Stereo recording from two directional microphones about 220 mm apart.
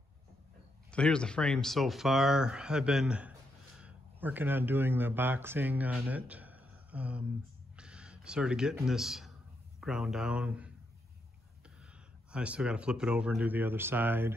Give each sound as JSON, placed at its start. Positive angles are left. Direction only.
{"t": 0.9, "sound": "speech", "side_deg": 5}
{"t": 7.7, "sound": "a sound", "side_deg": -5}
{"t": 8.8, "sound": "speech", "side_deg": 0}
{"t": 12.3, "sound": "speech", "side_deg": -5}